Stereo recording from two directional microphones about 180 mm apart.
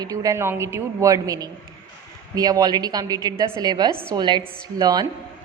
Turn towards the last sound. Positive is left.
turn(degrees=-20)  # may be behind; listen again after turning